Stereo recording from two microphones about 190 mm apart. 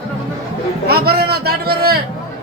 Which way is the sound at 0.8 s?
55° right (ahead or behind).